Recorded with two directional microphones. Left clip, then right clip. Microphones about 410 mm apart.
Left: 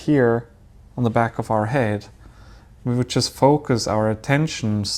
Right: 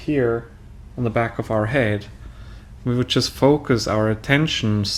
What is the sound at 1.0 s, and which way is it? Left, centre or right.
Speech, left.